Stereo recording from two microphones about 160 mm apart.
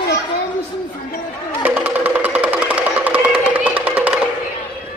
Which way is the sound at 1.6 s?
10° right (ahead or behind).